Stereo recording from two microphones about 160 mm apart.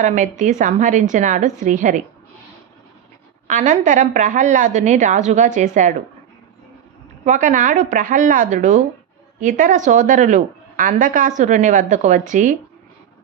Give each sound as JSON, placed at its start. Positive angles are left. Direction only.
{"t": 0.0, "sound": "a woman's voice", "side_deg": -50}
{"t": 3.4, "sound": "a woman's voice", "side_deg": -50}
{"t": 7.3, "sound": "a woman's voice", "side_deg": -55}